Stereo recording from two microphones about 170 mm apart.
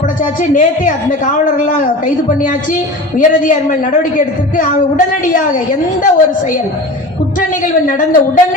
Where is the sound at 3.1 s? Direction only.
50° left (ahead or behind).